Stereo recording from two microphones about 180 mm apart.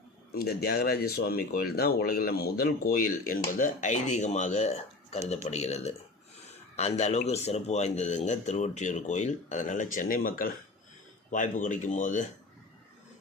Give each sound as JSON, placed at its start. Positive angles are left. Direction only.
{"t": 0.3, "sound": "a man's voice", "side_deg": 60}